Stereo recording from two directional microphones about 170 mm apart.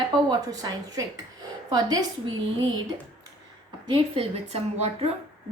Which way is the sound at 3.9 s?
35° right (ahead or behind).